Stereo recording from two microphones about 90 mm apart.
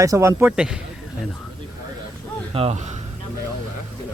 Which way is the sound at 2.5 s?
90° right.